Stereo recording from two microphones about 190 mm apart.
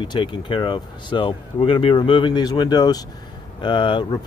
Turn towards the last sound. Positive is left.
turn(degrees=25)  # may be behind; listen again after turning